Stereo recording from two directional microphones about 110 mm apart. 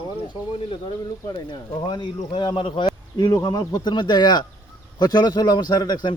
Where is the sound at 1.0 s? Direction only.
35° left (ahead or behind).